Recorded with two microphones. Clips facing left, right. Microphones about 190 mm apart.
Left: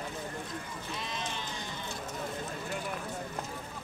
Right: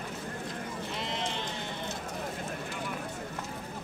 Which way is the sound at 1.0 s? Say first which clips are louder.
Right 4 dB; 65° right (ahead or behind).